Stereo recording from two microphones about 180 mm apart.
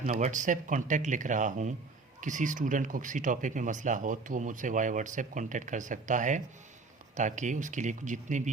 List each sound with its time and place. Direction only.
0.0 s speech: 45° right (ahead or behind)